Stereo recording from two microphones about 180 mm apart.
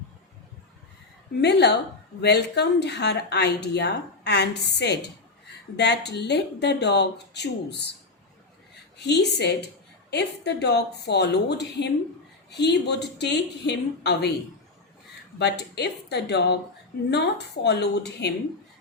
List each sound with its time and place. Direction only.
1.4 s speech: 70° left (ahead or behind)
9.0 s speech: 70° left (ahead or behind)
15.4 s speech: 70° left (ahead or behind)